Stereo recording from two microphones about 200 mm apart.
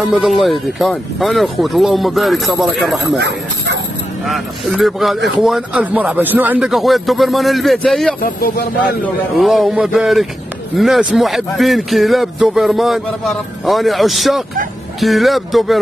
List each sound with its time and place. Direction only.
0.0 s a man's voice: centre (ahead or behind)
3.2 s speech: 55° right (ahead or behind)
4.3 s a man's voice: centre (ahead or behind)
8.2 s speech: 45° left (ahead or behind)
9.0 s a man's voice: centre (ahead or behind)